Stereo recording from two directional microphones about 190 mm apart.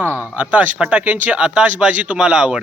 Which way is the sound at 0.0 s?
10° right (ahead or behind).